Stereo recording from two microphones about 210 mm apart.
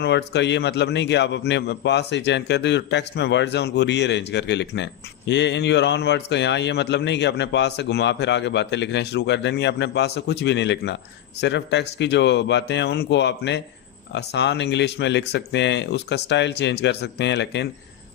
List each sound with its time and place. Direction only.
0.0 s a man's voice: 55° left (ahead or behind)